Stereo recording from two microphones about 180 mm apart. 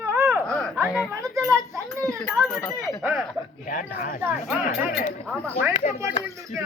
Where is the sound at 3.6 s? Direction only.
50° left (ahead or behind).